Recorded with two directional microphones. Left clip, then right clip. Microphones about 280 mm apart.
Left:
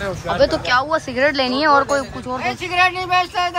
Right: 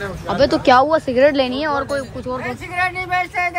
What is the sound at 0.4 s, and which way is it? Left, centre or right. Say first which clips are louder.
Speech: right 1 dB; right.